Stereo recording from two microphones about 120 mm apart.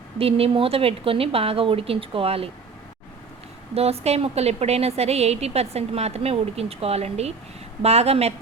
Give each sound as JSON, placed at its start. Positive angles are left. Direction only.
{"t": 0.2, "sound": "speech", "side_deg": -55}
{"t": 3.8, "sound": "a woman's voice", "side_deg": -60}